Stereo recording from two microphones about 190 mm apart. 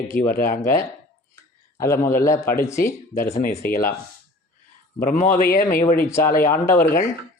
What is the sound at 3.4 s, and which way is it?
Speech, 50° left (ahead or behind).